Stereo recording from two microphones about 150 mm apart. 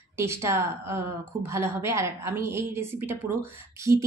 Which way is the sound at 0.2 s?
15° right (ahead or behind).